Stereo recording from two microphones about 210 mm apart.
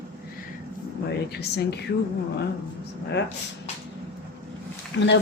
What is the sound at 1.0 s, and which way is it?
Speech, 50° left (ahead or behind).